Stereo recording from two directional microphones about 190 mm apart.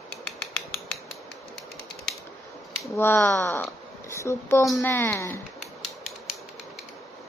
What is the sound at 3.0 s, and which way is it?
Speech, 15° left (ahead or behind).